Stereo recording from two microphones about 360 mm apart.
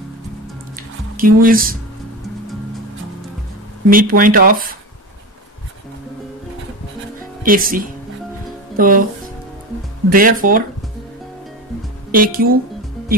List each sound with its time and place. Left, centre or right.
1.1 s speech: right
3.9 s speech: right
7.4 s speech: right
10.0 s speech: right
12.3 s speech: right